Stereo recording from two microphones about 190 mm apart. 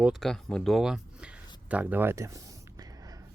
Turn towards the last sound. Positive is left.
turn(degrees=-20)  # may be behind; listen again after turning